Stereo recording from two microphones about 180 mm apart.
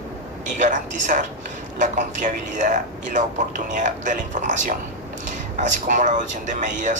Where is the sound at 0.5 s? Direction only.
45° right (ahead or behind).